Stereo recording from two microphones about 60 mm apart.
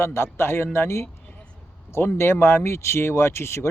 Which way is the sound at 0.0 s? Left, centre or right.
Left.